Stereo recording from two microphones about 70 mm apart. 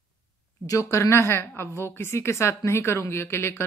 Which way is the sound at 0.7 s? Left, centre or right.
Left.